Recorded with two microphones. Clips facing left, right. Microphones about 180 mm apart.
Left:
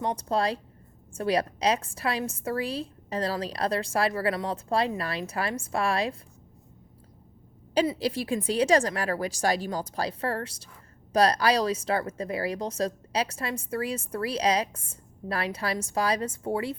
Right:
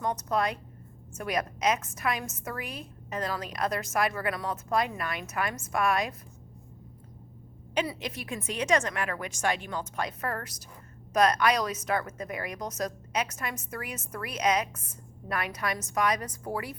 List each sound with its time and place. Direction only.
0.0 s a woman's voice: 30° left (ahead or behind)
7.9 s a woman's voice: 30° left (ahead or behind)